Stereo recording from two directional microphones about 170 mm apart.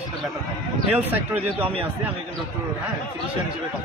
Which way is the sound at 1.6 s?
35° right (ahead or behind).